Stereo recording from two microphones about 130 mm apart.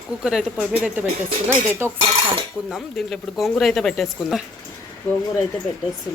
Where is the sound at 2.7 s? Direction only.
Centre (ahead or behind).